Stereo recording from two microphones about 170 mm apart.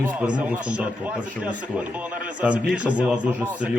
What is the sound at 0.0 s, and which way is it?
Speech, 5° right (ahead or behind).